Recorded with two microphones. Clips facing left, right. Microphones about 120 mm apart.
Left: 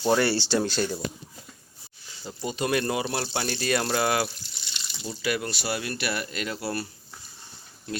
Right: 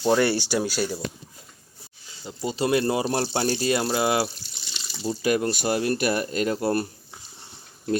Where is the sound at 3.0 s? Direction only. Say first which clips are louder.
Right 5 dB; 35° right (ahead or behind).